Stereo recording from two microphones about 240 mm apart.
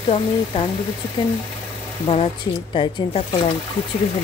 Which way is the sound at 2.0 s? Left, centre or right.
Left.